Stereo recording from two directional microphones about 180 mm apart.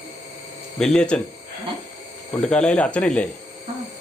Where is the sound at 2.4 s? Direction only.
5° left (ahead or behind).